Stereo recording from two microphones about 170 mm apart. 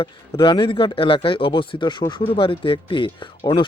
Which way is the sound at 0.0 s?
30° left (ahead or behind).